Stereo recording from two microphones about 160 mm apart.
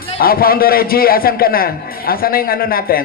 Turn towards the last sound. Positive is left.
turn(degrees=65)  # may be behind; listen again after turning